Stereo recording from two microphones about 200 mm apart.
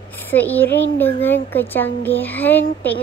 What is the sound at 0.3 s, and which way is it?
A woman's voice, 10° left (ahead or behind).